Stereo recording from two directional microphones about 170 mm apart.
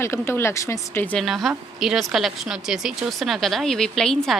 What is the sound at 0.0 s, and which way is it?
Speech, 15° left (ahead or behind).